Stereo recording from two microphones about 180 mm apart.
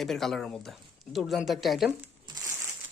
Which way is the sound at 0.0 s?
Centre (ahead or behind).